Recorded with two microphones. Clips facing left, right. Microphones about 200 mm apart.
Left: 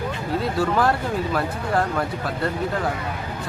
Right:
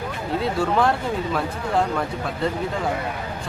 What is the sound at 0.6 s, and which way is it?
Speech, centre (ahead or behind).